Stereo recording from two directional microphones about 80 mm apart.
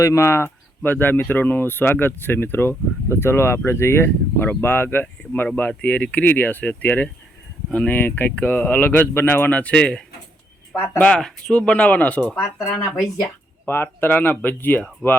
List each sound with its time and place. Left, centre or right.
0.0 s speech: left; by 11.2 s centre
11.2 s speech: centre
13.7 s speech: left